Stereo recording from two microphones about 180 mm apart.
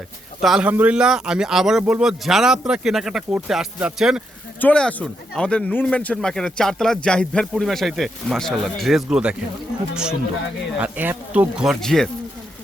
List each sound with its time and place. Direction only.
0.4 s speech: 5° right (ahead or behind)